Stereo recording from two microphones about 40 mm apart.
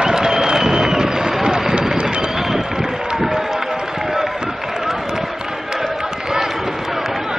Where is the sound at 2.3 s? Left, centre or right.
Centre.